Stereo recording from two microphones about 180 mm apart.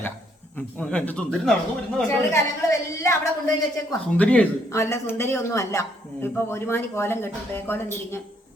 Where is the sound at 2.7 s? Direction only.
15° left (ahead or behind).